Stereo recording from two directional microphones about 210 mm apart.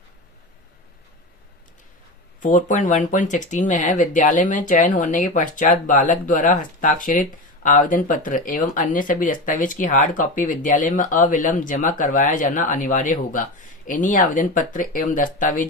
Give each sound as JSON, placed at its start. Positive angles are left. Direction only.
{"t": 2.4, "sound": "speech", "side_deg": 40}